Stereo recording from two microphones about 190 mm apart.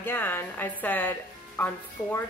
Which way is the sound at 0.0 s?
10° left (ahead or behind).